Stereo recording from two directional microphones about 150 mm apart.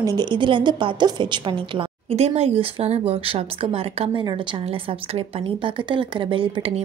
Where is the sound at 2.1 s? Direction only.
45° right (ahead or behind).